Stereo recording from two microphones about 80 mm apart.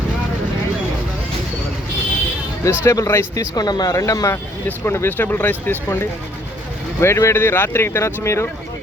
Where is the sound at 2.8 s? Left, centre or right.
Left.